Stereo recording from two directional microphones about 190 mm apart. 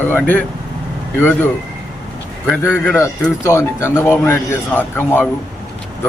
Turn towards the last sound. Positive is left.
turn(degrees=10)  # may be behind; listen again after turning